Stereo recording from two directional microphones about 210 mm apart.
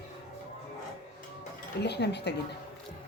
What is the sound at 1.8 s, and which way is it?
Speech, 55° left (ahead or behind).